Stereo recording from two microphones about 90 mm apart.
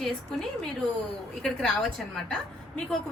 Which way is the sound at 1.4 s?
5° left (ahead or behind).